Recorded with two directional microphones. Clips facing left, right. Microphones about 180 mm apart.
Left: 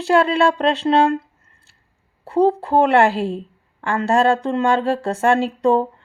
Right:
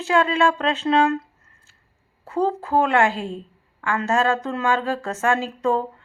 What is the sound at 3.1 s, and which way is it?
Speech, 70° left (ahead or behind).